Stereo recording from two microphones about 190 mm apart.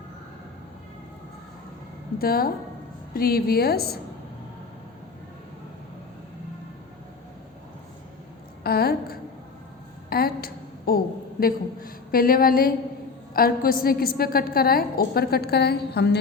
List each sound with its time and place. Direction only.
2.1 s a woman's voice: 50° left (ahead or behind)
8.6 s a woman's voice: 55° left (ahead or behind)